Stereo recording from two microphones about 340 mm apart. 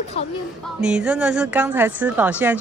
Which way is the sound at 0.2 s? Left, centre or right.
Centre.